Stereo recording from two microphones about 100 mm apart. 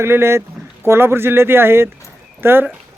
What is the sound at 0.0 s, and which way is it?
Speech, 25° right (ahead or behind).